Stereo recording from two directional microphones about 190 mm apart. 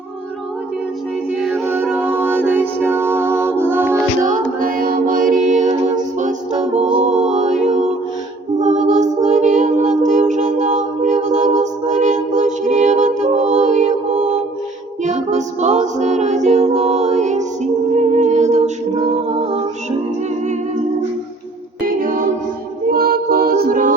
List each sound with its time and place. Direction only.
1.4 s music: centre (ahead or behind)
4.6 s music: 45° right (ahead or behind)
19.0 s singing: 35° right (ahead or behind)
21.8 s music: 45° right (ahead or behind)